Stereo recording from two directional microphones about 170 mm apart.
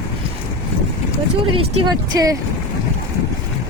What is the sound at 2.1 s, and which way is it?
Speech, 20° right (ahead or behind).